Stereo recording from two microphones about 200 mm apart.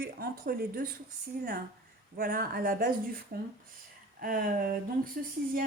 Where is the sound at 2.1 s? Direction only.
45° right (ahead or behind).